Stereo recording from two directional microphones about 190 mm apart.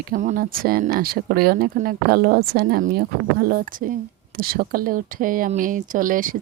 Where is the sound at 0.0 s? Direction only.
40° right (ahead or behind).